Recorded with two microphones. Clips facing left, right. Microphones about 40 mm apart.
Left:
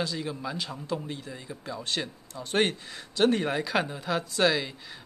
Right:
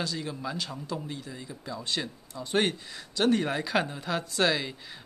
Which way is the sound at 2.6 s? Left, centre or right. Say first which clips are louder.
Left 1 dB; centre.